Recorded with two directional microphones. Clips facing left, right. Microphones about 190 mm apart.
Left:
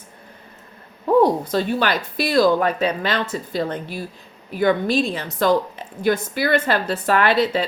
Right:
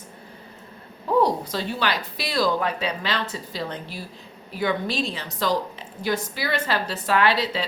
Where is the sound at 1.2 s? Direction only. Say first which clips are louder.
Left 5 dB; 50° left (ahead or behind).